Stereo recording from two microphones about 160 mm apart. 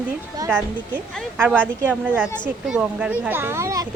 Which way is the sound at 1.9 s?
10° right (ahead or behind).